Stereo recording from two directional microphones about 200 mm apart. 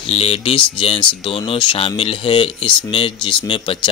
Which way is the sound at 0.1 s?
30° left (ahead or behind).